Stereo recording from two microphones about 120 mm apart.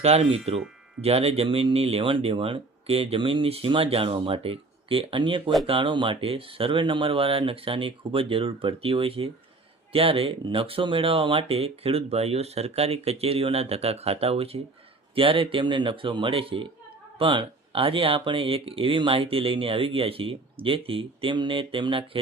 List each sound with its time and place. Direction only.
0.0 s speech: 60° right (ahead or behind); by 22.2 s 45° right (ahead or behind)